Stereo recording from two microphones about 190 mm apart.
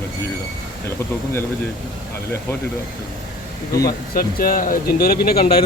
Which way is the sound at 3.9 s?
50° left (ahead or behind).